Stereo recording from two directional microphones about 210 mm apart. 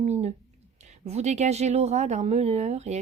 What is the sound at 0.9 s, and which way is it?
Speech, 30° right (ahead or behind).